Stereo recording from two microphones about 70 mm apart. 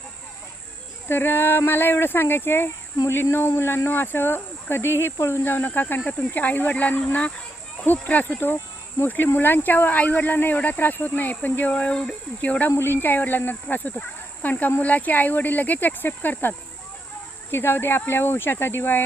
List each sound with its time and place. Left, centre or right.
1.0 s speech: left
12.7 s speech: left